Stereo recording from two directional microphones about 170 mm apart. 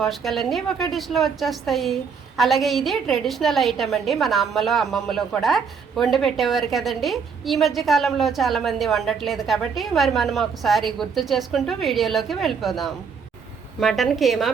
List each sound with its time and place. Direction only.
0.0 s a woman's voice: centre (ahead or behind)